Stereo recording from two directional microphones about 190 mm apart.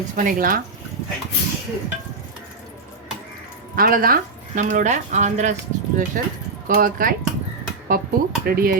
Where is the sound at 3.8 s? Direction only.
50° right (ahead or behind).